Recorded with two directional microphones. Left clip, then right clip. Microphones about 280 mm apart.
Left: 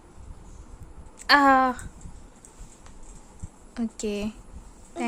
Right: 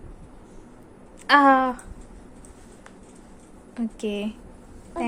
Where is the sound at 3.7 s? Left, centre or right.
Centre.